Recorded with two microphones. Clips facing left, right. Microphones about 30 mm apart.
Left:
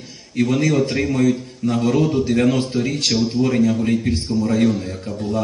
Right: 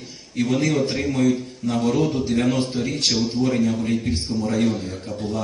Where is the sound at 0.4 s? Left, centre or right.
Centre.